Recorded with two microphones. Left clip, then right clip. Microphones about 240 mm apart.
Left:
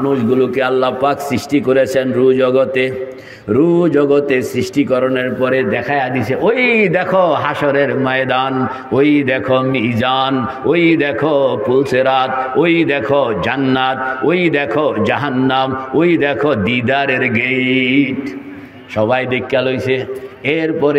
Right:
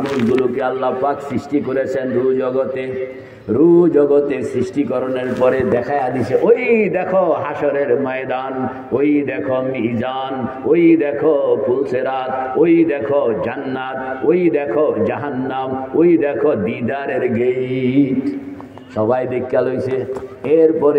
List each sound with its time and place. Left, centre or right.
0.6 s a man's voice: left
17.4 s mantra: centre
19.5 s a man's voice: left